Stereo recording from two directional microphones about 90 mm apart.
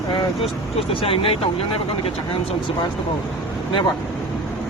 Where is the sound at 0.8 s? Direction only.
90° left.